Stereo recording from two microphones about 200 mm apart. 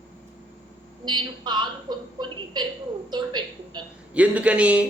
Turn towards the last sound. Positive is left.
turn(degrees=-5)  # may be behind; listen again after turning